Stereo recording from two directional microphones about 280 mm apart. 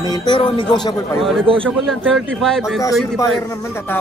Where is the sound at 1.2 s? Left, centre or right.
Centre.